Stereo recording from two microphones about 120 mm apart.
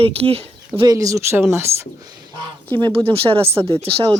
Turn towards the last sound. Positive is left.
turn(degrees=-55)  # may be behind; listen again after turning